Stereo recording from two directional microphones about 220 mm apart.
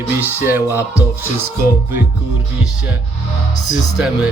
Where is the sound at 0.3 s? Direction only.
10° right (ahead or behind).